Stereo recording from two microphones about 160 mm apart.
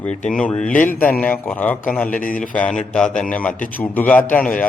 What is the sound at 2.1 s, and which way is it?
Speech, 60° left (ahead or behind).